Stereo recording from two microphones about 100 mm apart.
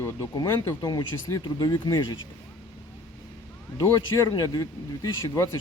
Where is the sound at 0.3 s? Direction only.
45° left (ahead or behind).